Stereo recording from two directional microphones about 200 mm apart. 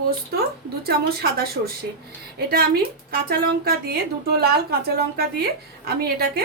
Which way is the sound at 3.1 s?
50° right (ahead or behind).